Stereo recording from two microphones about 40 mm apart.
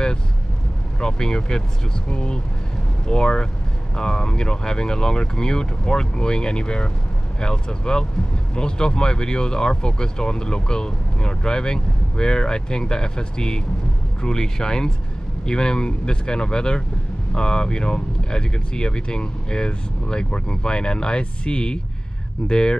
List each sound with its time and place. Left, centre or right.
1.0 s speech: centre